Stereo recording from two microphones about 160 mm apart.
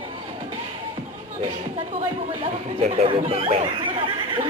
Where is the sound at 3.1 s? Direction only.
35° right (ahead or behind).